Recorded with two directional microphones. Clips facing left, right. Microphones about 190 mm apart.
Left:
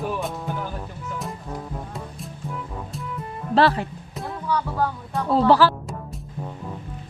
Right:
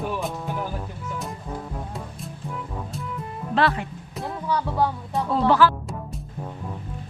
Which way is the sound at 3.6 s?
35° left (ahead or behind).